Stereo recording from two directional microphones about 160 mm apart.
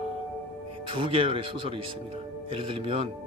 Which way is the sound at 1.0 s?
35° right (ahead or behind).